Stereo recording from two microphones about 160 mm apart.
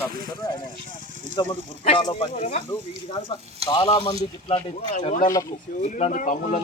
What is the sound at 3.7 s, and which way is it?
Speech, 25° left (ahead or behind).